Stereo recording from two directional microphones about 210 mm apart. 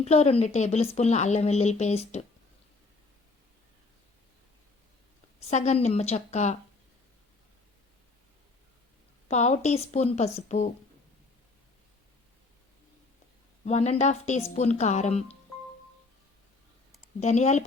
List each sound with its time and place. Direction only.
0.0 s speech: 30° left (ahead or behind)
5.4 s speech: 30° left (ahead or behind)
9.3 s speech: 35° left (ahead or behind)
13.7 s speech: 30° left (ahead or behind)
17.2 s speech: 30° left (ahead or behind)